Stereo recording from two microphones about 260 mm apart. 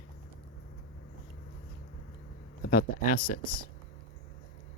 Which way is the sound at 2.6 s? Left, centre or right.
Left.